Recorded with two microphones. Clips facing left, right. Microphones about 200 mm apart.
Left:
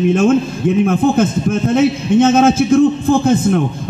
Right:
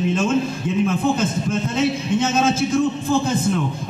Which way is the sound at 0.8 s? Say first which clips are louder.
Left 5 dB; 50° left (ahead or behind).